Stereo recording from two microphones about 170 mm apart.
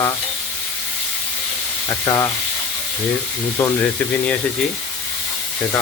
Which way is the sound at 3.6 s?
5° left (ahead or behind).